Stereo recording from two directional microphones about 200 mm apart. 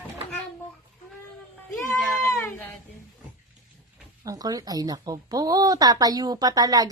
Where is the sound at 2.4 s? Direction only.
10° left (ahead or behind).